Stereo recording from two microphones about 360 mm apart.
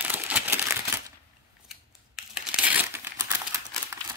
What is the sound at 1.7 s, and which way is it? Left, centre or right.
Crumpling, centre.